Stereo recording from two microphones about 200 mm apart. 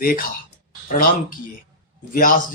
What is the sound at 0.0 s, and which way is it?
Speech, 45° left (ahead or behind).